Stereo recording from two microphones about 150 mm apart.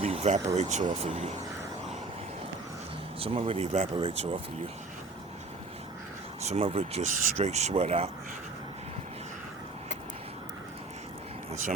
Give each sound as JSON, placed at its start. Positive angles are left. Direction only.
{"t": 0.0, "sound": "a sound", "side_deg": -45}
{"t": 0.4, "sound": "speech", "side_deg": -50}
{"t": 3.2, "sound": "speech", "side_deg": -40}
{"t": 6.4, "sound": "speech", "side_deg": -45}